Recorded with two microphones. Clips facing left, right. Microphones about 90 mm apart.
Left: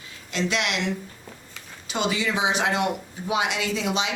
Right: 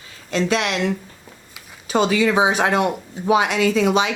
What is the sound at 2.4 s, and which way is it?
Speech, 50° right (ahead or behind).